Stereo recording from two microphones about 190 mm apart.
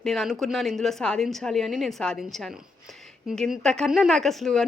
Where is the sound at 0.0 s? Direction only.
Centre (ahead or behind).